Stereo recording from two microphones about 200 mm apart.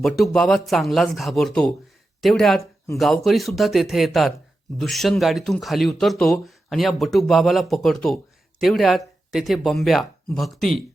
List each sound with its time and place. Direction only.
0.2 s speech: centre (ahead or behind)